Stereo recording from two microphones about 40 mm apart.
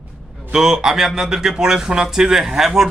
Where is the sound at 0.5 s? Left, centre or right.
Centre.